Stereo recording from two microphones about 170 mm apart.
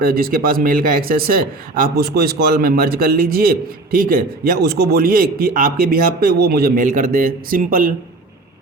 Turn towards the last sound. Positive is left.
turn(degrees=-55)  # may be behind; listen again after turning